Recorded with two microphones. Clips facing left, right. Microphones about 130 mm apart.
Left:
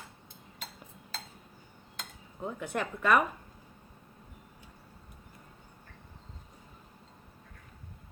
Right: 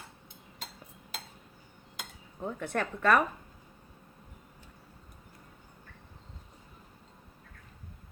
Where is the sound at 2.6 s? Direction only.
10° left (ahead or behind).